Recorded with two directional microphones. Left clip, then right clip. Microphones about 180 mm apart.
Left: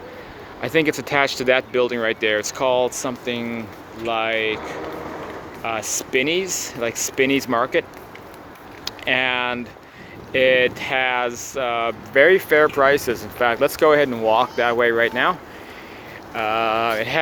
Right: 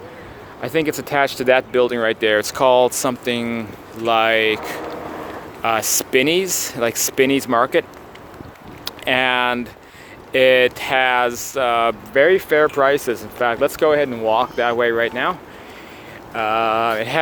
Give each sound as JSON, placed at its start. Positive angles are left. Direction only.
{"t": 0.6, "sound": "speech", "side_deg": 0}
{"t": 7.3, "sound": "speech", "side_deg": -15}
{"t": 12.1, "sound": "speech", "side_deg": 0}
{"t": 13.8, "sound": "speech", "side_deg": 10}
{"t": 14.3, "sound": "speech", "side_deg": -5}
{"t": 16.3, "sound": "speech", "side_deg": -15}